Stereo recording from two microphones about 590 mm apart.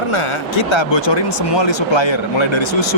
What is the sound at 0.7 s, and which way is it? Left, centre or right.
Speech, left.